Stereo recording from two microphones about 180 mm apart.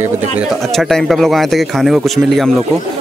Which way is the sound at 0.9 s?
Centre (ahead or behind).